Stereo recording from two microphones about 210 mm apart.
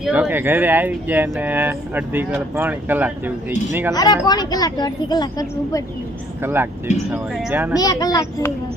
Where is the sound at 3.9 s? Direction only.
20° left (ahead or behind).